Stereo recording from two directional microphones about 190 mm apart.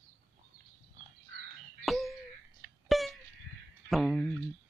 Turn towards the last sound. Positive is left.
turn(degrees=5)  # may be behind; listen again after turning